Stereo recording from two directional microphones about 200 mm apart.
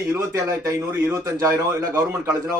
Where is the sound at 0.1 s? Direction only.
15° right (ahead or behind).